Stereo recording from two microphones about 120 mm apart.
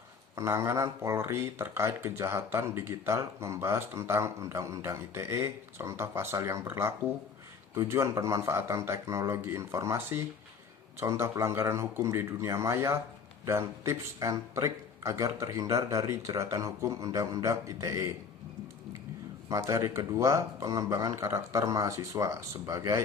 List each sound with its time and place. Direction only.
0.3 s speech: 25° right (ahead or behind)
19.5 s speech: 25° right (ahead or behind)